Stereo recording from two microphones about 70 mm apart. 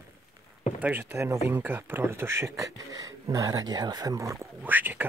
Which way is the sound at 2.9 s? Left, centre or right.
Right.